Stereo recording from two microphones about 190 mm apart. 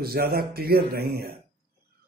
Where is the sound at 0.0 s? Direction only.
55° right (ahead or behind).